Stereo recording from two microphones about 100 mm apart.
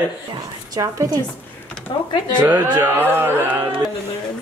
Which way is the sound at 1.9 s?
50° left (ahead or behind).